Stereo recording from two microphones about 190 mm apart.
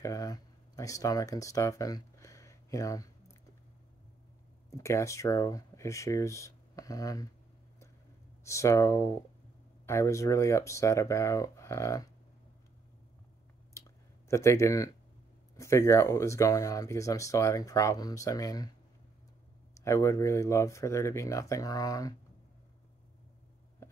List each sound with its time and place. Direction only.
0.0 s a sound: 20° left (ahead or behind)
4.6 s speech: 15° left (ahead or behind)
8.5 s speech: 15° left (ahead or behind)
13.8 s a sound: 15° left (ahead or behind)
14.3 s speech: 15° left (ahead or behind)
19.8 s speech: 15° left (ahead or behind)